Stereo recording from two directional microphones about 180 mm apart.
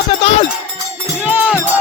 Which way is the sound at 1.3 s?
10° right (ahead or behind).